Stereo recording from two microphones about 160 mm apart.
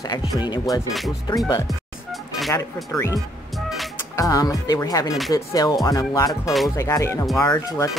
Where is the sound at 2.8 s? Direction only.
20° left (ahead or behind).